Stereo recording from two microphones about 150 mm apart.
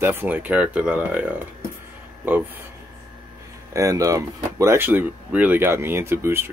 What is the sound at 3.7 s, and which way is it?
Speech, 20° right (ahead or behind).